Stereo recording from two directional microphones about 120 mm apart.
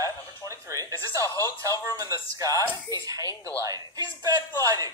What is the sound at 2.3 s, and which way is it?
A man's voice, 25° right (ahead or behind).